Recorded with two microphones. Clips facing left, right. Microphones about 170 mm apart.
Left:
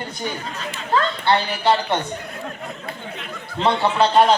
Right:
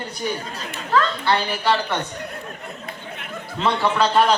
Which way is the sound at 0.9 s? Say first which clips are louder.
Left 1 dB; 25° left (ahead or behind).